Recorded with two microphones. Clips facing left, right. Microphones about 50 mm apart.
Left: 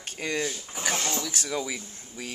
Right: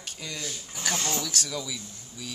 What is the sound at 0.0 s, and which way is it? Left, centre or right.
Speech, left.